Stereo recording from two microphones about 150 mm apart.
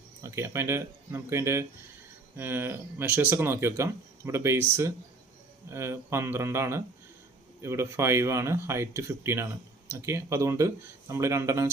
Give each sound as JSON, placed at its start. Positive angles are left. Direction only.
{"t": 0.2, "sound": "speech", "side_deg": -20}